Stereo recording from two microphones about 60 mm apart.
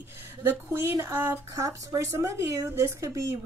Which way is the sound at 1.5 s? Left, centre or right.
Right.